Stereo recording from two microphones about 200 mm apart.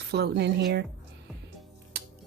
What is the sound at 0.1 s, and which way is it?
Speech, 55° right (ahead or behind).